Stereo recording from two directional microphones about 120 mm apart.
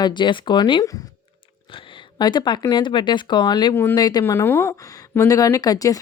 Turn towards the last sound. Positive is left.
turn(degrees=30)  # may be behind; listen again after turning